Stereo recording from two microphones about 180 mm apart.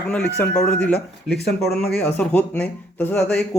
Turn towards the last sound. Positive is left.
turn(degrees=5)  # may be behind; listen again after turning